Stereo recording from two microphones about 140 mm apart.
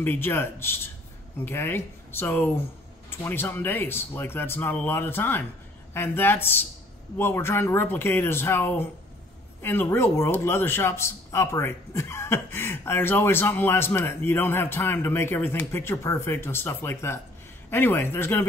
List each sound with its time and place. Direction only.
0.0 s a man's voice: 15° left (ahead or behind)